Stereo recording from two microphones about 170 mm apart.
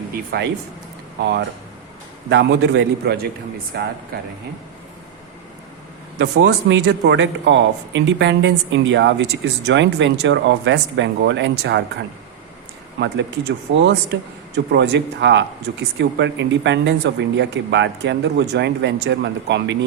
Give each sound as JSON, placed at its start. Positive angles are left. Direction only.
{"t": 0.1, "sound": "speech", "side_deg": -75}
{"t": 2.3, "sound": "a man's voice", "side_deg": -90}
{"t": 4.1, "sound": "speech", "side_deg": -60}
{"t": 6.1, "sound": "speech", "side_deg": -80}
{"t": 13.7, "sound": "speech", "side_deg": -90}